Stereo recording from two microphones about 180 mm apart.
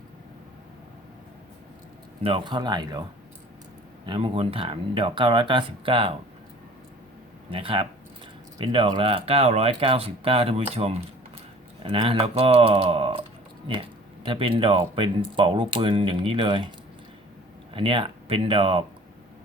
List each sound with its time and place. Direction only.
2.2 s speech: 30° right (ahead or behind)
4.0 s speech: 30° right (ahead or behind)
7.5 s speech: 30° right (ahead or behind)
14.3 s speech: 30° right (ahead or behind)
17.7 s speech: 30° right (ahead or behind)